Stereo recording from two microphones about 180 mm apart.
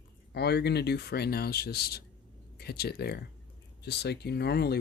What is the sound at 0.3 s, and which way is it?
Speech, 65° left (ahead or behind).